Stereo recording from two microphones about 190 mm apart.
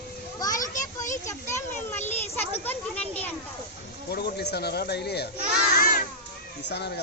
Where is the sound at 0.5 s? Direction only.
45° left (ahead or behind).